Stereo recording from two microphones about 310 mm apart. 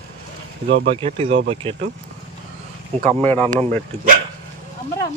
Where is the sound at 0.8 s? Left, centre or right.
Centre.